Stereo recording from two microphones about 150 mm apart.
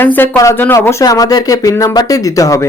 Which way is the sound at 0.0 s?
15° left (ahead or behind).